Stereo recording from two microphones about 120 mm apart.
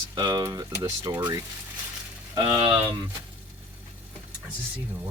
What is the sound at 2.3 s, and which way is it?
Speech, 40° right (ahead or behind).